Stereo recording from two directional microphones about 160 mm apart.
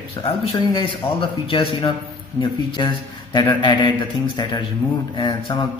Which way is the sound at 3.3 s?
30° left (ahead or behind).